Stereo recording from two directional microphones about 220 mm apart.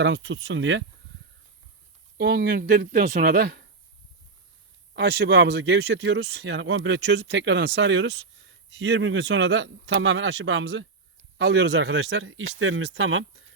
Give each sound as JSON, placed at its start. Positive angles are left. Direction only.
{"t": 0.0, "sound": "speech", "side_deg": -55}
{"t": 2.1, "sound": "speech", "side_deg": -45}
{"t": 4.9, "sound": "speech", "side_deg": -45}